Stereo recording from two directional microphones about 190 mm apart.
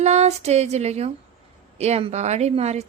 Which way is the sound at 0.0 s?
35° right (ahead or behind).